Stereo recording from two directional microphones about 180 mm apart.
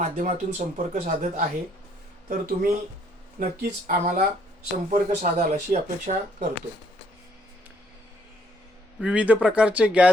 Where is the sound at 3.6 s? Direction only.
60° right (ahead or behind).